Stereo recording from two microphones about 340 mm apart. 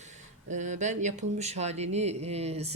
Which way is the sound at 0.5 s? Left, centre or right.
Right.